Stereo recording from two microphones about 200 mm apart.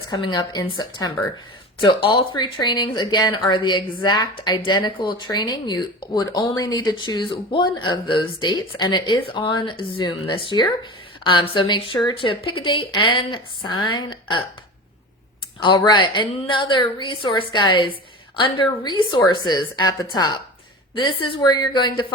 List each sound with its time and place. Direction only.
0.1 s speech: 20° left (ahead or behind)
15.6 s speech: 20° left (ahead or behind)